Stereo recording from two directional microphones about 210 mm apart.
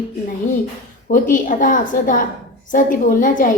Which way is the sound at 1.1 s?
40° left (ahead or behind).